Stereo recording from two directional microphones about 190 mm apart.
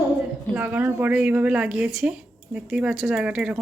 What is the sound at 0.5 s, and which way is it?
A woman's voice, 10° right (ahead or behind).